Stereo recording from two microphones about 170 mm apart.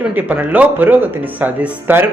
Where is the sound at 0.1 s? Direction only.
10° right (ahead or behind).